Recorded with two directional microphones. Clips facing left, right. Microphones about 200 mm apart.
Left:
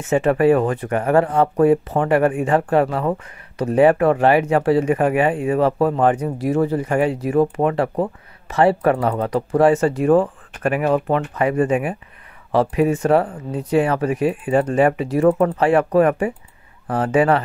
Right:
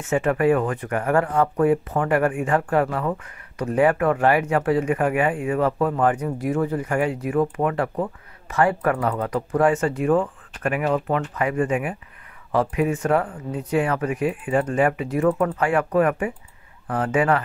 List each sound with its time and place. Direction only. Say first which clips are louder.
0.1 s speech: left 4 dB; 30° left (ahead or behind)